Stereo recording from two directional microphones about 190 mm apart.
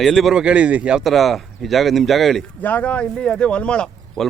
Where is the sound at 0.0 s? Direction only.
Centre (ahead or behind).